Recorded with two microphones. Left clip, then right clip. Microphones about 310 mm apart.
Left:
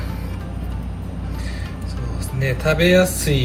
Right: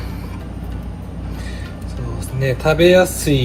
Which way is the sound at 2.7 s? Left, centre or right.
Centre.